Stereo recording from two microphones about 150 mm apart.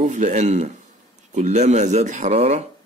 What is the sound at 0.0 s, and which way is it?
Speech, 55° right (ahead or behind).